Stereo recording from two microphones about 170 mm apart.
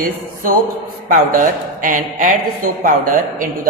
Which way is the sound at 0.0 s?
55° right (ahead or behind).